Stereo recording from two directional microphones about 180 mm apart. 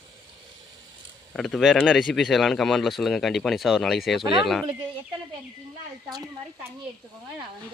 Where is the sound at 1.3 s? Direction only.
Centre (ahead or behind).